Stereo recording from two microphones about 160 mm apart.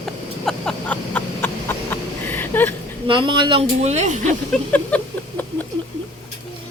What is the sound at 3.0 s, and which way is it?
A woman's voice, 30° right (ahead or behind).